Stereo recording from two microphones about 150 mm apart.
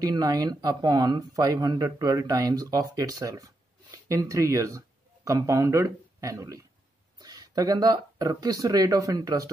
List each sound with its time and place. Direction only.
0.0 s speech: 25° right (ahead or behind)